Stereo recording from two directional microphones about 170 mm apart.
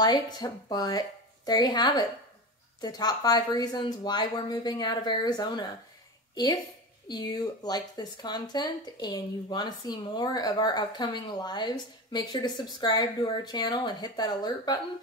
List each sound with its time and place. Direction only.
0.0 s a woman's voice: 25° left (ahead or behind)